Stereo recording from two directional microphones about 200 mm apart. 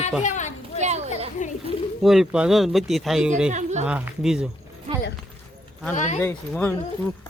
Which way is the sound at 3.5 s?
35° right (ahead or behind).